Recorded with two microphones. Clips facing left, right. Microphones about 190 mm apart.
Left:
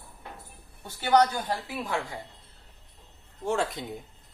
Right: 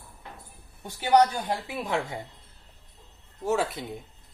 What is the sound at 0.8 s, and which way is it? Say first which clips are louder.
A woman's voice: right 1 dB; 15° right (ahead or behind).